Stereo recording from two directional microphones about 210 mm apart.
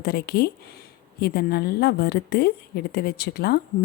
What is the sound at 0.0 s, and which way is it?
A woman's voice, 50° left (ahead or behind).